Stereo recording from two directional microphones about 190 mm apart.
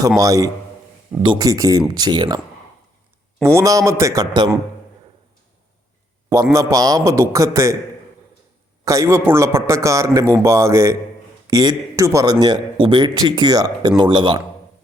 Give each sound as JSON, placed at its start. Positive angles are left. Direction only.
{"t": 0.2, "sound": "a man's voice", "side_deg": -20}
{"t": 3.4, "sound": "a man's voice", "side_deg": -15}
{"t": 6.2, "sound": "a man's voice", "side_deg": -15}
{"t": 8.8, "sound": "a man's voice", "side_deg": -15}